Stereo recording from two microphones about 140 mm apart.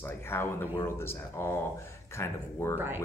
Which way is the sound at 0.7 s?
15° left (ahead or behind).